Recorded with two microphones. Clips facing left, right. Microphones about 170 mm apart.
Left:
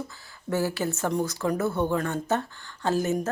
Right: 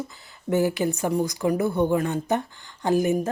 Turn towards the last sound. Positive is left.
turn(degrees=-15)  # may be behind; listen again after turning